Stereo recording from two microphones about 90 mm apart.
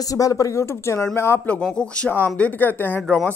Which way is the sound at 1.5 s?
10° left (ahead or behind).